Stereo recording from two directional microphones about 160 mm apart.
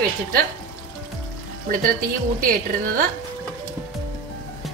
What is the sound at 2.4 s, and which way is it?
Speech, 60° right (ahead or behind).